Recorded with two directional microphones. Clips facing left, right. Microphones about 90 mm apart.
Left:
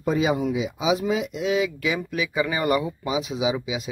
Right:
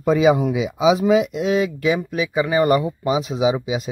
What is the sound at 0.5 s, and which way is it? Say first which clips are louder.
Speech: right 6 dB; 90° right.